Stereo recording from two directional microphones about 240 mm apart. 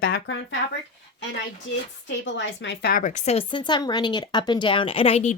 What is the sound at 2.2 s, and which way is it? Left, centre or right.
Speech, left.